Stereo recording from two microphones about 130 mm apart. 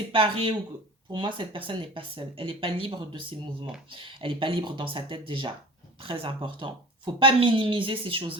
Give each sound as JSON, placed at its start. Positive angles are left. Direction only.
{"t": 0.1, "sound": "speech", "side_deg": -40}